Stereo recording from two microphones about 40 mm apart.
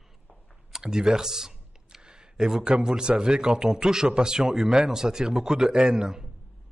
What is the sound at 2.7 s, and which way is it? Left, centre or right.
A man's voice, centre.